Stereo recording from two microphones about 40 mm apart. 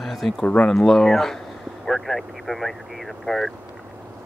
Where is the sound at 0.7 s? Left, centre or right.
Centre.